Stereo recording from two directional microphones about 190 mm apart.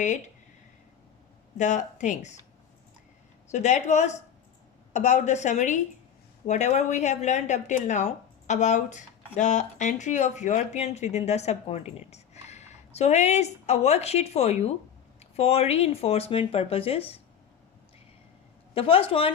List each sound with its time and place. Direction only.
1.5 s speech: 40° left (ahead or behind)
3.5 s speech: 40° left (ahead or behind)
18.7 s a woman's voice: 30° left (ahead or behind)